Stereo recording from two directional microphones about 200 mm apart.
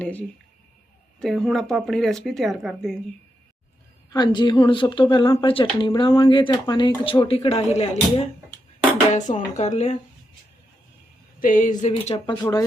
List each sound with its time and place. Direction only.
0.0 s speech: 10° left (ahead or behind)
4.1 s speech: 20° left (ahead or behind)
11.3 s speech: 40° left (ahead or behind); by 12.6 s 20° left (ahead or behind)